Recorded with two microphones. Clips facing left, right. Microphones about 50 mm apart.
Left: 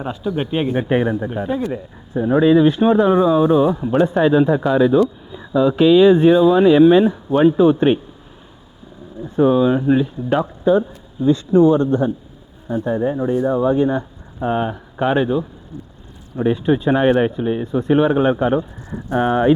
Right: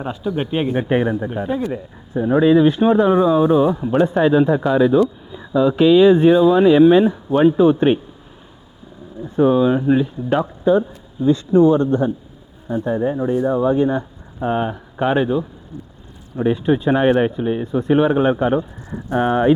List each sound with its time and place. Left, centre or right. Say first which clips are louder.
0.0 s speech: even; centre
2.4 s speech: even; centre
9.2 s speech: even; centre